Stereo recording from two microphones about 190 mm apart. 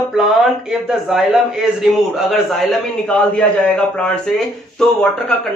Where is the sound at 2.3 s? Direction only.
Centre (ahead or behind).